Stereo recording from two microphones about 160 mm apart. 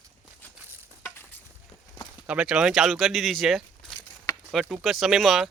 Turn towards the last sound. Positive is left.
turn(degrees=0)  # may be behind; listen again after turning